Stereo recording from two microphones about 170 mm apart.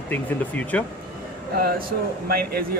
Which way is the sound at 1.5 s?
65° right (ahead or behind).